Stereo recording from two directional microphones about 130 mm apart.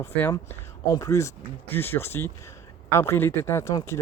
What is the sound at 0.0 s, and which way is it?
Speech, 15° left (ahead or behind).